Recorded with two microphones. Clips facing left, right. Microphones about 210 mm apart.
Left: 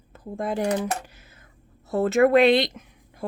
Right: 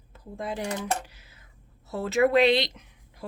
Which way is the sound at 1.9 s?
50° left (ahead or behind).